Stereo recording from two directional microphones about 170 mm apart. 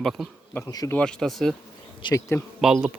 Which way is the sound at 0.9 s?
5° left (ahead or behind).